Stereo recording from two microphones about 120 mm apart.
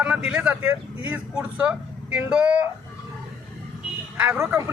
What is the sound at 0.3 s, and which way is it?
Speech, 10° right (ahead or behind).